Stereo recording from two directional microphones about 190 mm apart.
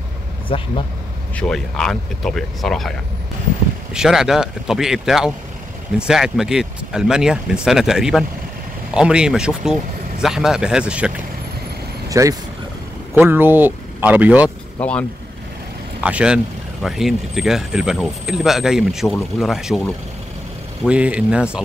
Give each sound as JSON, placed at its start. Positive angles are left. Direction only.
{"t": 0.5, "sound": "speech", "side_deg": 30}
{"t": 1.3, "sound": "speech", "side_deg": 5}
{"t": 3.9, "sound": "speech", "side_deg": -5}
{"t": 12.1, "sound": "speech", "side_deg": -20}
{"t": 14.8, "sound": "speech", "side_deg": 5}
{"t": 16.0, "sound": "speech", "side_deg": -5}
{"t": 20.8, "sound": "speech", "side_deg": -5}